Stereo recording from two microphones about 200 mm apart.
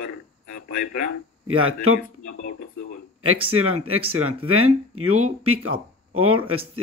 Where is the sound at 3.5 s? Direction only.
90° right.